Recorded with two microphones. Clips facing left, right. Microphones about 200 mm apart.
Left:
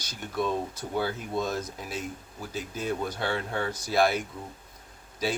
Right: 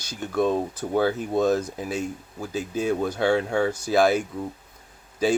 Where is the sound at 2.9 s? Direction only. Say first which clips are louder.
Right 8 dB; 50° right (ahead or behind).